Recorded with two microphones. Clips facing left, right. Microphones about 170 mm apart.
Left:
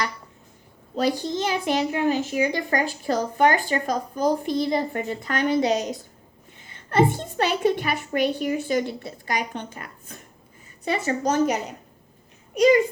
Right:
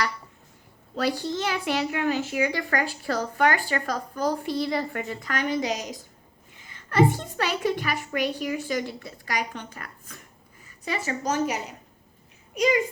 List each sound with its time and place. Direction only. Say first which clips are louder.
0.9 s a woman's voice: left 3 dB; 20° left (ahead or behind); by 12.8 s 35° left (ahead or behind)